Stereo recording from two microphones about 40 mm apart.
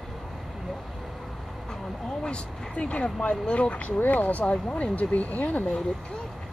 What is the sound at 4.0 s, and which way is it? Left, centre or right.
Speech, left.